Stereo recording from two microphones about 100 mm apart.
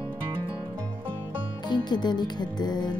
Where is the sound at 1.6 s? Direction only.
45° left (ahead or behind).